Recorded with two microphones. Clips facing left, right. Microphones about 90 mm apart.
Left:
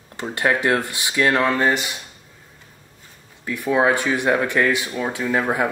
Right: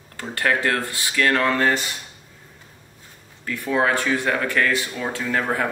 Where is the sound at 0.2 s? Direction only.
20° left (ahead or behind).